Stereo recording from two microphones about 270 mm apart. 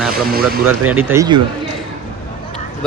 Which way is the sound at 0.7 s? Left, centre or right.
Centre.